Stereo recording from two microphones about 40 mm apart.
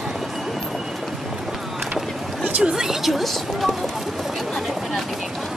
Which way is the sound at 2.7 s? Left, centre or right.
Centre.